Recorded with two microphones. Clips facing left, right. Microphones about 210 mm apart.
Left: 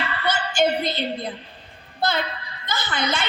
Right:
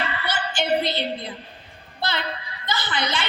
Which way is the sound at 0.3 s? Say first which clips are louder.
Left 3 dB; 45° left (ahead or behind).